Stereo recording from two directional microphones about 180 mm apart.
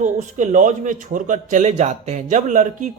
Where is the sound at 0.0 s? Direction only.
45° right (ahead or behind).